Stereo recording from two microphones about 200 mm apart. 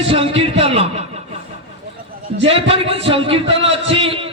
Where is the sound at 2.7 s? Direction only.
30° right (ahead or behind).